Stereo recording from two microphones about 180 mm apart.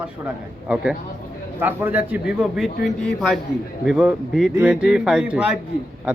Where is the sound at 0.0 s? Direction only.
5° right (ahead or behind).